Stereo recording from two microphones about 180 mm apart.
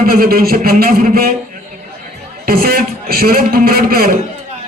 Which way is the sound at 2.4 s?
55° right (ahead or behind).